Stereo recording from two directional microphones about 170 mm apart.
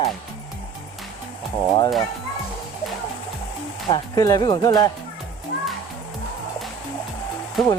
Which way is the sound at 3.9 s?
20° left (ahead or behind).